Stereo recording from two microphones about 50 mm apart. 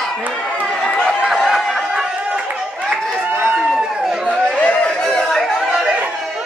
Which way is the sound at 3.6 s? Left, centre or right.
Centre.